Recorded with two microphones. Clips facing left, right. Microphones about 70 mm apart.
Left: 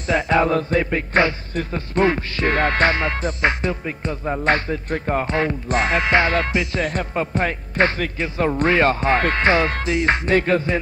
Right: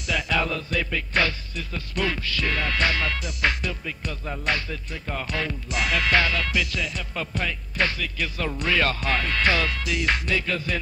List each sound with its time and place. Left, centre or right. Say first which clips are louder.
0.0 s speech: left 8 dB; left
6.3 s music: left 6 dB; left
6.8 s music: left 8 dB; left
7.2 s speech: left 6 dB; left
9.3 s music: left 6 dB; left